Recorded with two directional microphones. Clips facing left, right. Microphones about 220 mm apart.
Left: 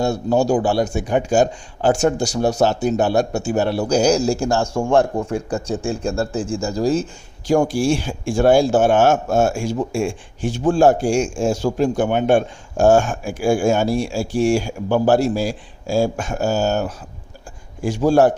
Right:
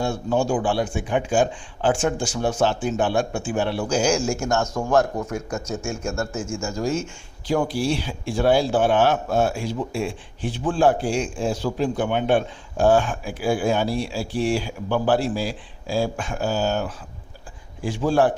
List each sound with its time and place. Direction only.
0.0 s speech: 40° left (ahead or behind)